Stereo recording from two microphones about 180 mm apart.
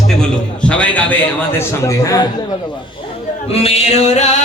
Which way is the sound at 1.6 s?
15° left (ahead or behind).